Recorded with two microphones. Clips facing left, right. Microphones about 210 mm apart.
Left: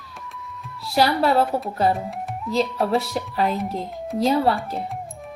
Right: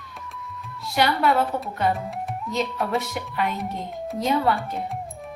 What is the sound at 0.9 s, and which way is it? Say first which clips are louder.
A woman's voice: left 2 dB; 35° left (ahead or behind).